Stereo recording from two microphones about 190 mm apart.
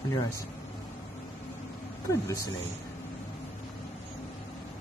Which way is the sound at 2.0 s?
15° left (ahead or behind).